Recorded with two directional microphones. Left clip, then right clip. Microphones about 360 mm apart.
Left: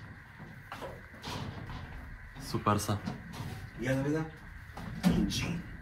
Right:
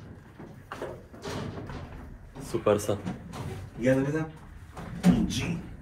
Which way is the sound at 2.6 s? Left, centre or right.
Centre.